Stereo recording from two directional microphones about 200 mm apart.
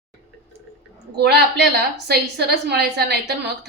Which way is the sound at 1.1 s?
55° right (ahead or behind).